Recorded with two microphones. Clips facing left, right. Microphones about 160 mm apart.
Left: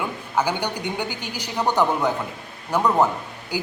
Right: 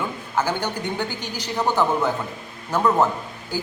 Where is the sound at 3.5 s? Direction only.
15° left (ahead or behind).